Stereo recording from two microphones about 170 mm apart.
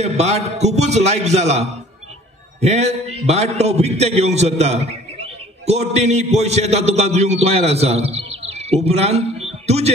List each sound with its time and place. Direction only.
0.0 s a man's voice: 40° right (ahead or behind)